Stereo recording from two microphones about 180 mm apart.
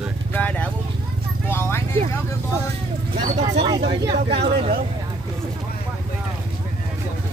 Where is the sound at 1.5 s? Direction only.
15° left (ahead or behind).